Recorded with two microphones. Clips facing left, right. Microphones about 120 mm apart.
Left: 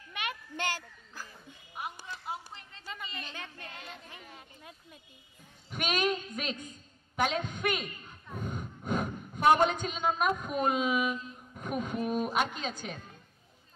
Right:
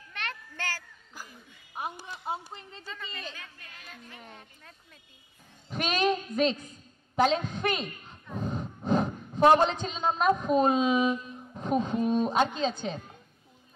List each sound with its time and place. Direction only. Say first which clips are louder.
0.1 s a sound: left 1 dB; 10° left (ahead or behind)
1.8 s a woman's voice: right 4 dB; 25° right (ahead or behind)
2.9 s a woman's voice: right 1 dB; 15° left (ahead or behind)
4.3 s speech: even; 5° left (ahead or behind)
5.7 s a woman's voice: right 4 dB; 30° right (ahead or behind)
11.5 s a sound: right 6 dB; 30° right (ahead or behind)
12.2 s a woman's voice: right 5 dB; 30° right (ahead or behind)